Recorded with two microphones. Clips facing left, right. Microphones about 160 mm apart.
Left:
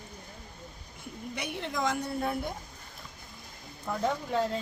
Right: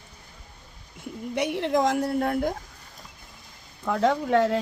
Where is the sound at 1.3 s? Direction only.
75° right (ahead or behind).